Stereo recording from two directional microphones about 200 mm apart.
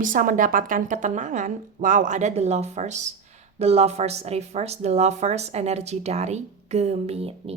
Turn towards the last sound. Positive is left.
turn(degrees=-30)  # may be behind; listen again after turning